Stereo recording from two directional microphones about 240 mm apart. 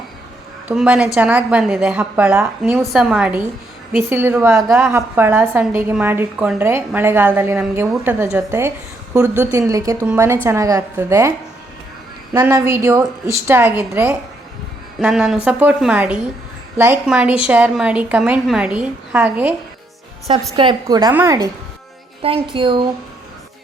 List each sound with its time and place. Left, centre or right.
0.7 s a woman's voice: centre
20.2 s a woman's voice: centre
22.5 s speech: right